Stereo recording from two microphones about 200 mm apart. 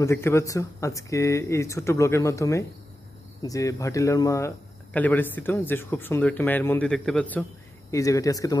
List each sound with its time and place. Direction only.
0.0 s speech: 15° left (ahead or behind)